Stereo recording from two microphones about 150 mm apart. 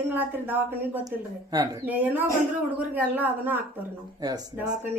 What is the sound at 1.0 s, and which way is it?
Speech, 25° right (ahead or behind).